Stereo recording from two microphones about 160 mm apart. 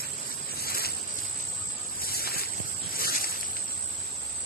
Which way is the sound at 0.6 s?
70° left (ahead or behind).